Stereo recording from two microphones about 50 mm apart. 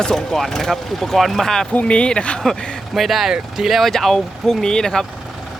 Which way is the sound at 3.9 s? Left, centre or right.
Centre.